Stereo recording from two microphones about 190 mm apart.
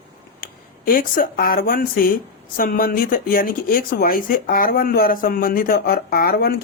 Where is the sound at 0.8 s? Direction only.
45° left (ahead or behind).